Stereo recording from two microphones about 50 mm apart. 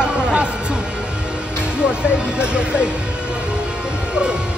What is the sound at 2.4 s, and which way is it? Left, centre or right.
Speech, right.